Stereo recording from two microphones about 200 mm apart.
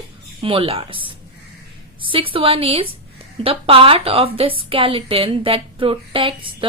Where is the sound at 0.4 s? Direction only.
25° right (ahead or behind).